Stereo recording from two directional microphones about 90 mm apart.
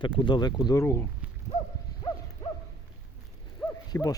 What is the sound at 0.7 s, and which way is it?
Speech, 30° left (ahead or behind).